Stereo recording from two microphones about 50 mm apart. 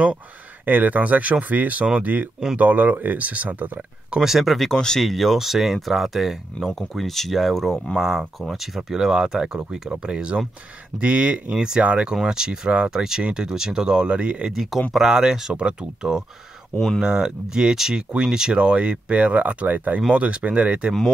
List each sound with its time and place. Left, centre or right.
0.7 s speech: right
4.2 s speech: centre
4.7 s speech: centre
5.1 s speech: centre
8.0 s speech: centre
14.5 s speech: centre; by 20.9 s right